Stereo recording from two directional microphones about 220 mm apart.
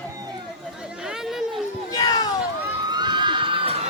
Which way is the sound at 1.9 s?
15° left (ahead or behind).